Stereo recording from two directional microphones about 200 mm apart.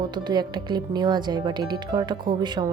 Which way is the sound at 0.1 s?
20° right (ahead or behind).